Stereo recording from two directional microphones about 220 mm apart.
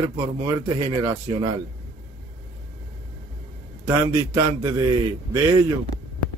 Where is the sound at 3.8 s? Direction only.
15° right (ahead or behind).